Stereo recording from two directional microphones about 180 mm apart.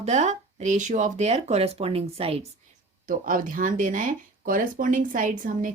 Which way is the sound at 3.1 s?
50° right (ahead or behind).